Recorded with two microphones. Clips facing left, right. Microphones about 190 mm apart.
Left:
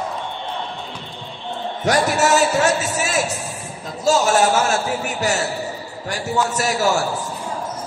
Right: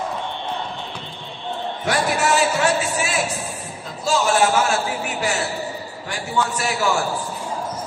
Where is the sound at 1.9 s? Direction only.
40° left (ahead or behind).